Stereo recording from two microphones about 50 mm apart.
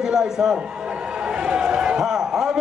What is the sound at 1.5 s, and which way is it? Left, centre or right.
Run, centre.